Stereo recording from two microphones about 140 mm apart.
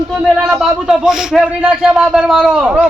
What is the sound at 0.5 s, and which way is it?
A man's voice, 5° right (ahead or behind).